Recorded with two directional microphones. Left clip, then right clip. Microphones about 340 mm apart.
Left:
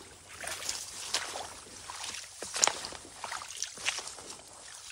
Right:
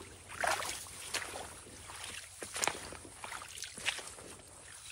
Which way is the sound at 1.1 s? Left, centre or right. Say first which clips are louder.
Left 5 dB; centre.